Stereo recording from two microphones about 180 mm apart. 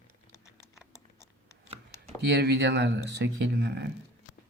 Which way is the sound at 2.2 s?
65° right (ahead or behind).